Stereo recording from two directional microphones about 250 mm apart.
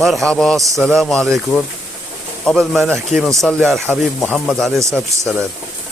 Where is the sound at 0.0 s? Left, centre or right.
Centre.